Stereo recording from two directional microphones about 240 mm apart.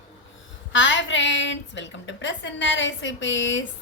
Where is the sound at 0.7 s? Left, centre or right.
Left.